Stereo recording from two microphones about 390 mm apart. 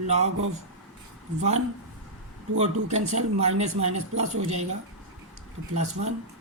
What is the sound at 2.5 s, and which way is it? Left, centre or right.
Speech, centre.